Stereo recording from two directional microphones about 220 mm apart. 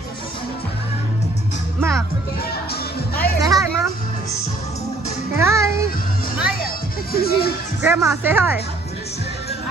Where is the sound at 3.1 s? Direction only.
45° left (ahead or behind).